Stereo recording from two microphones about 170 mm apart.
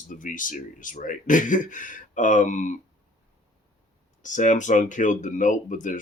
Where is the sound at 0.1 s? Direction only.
50° left (ahead or behind).